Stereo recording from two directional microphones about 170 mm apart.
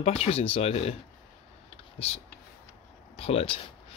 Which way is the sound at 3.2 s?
35° left (ahead or behind).